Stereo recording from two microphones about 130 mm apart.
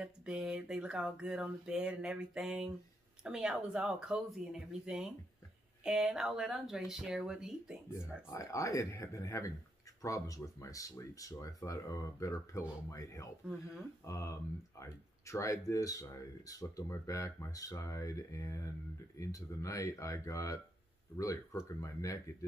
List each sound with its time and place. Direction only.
0.0 s a sound: 5° right (ahead or behind)
3.3 s speech: 5° right (ahead or behind)
8.3 s speech: 25° left (ahead or behind)